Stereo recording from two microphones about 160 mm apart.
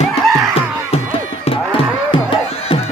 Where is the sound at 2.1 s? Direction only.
30° left (ahead or behind).